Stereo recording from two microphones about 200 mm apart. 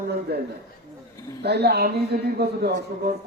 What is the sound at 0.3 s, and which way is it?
Speech, 55° right (ahead or behind).